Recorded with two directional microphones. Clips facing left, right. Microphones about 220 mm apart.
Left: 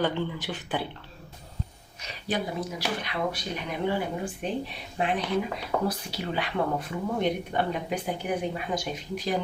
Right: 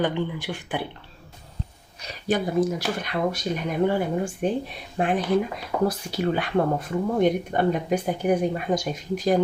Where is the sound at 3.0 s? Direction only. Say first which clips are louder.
Right 5 dB; 45° right (ahead or behind).